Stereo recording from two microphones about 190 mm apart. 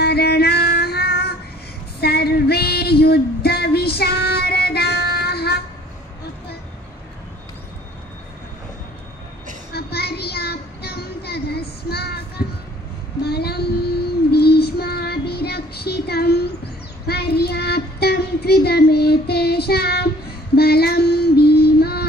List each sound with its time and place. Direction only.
0.0 s music: 60° left (ahead or behind)
2.0 s a sound: 55° left (ahead or behind)
9.7 s child singing: 55° left (ahead or behind)
13.2 s child singing: 55° left (ahead or behind)